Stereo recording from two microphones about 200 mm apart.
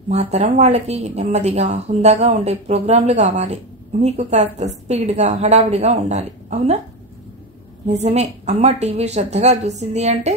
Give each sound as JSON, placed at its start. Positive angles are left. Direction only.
{"t": 0.1, "sound": "speech", "side_deg": -35}
{"t": 8.0, "sound": "speech", "side_deg": -35}